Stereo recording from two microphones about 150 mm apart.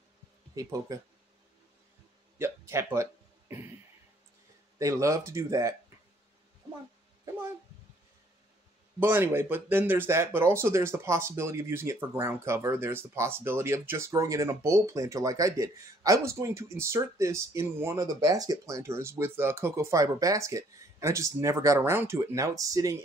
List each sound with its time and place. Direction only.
0.6 s speech: 25° right (ahead or behind)
2.3 s a sound: 15° right (ahead or behind)
4.7 s speech: 20° right (ahead or behind)
9.0 s speech: 15° right (ahead or behind)